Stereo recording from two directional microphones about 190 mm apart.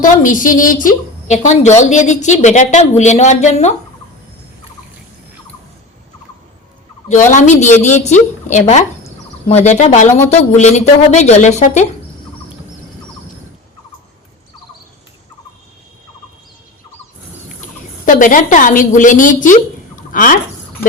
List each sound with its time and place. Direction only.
0.0 s a woman's voice: 45° left (ahead or behind)
7.3 s speech: 40° left (ahead or behind)
18.0 s a woman's voice: 45° left (ahead or behind)